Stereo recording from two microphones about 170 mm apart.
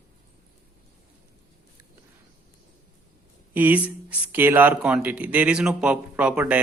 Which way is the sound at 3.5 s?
10° right (ahead or behind).